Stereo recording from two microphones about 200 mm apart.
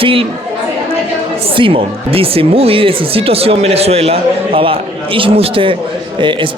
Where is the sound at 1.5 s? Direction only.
25° right (ahead or behind).